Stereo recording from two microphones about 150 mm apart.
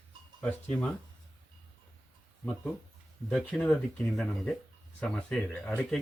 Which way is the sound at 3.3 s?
5° left (ahead or behind).